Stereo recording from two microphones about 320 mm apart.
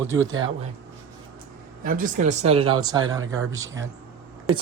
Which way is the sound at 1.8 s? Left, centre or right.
Right.